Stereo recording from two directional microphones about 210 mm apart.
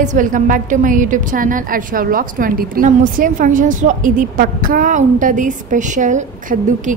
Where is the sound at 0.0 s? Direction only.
35° right (ahead or behind).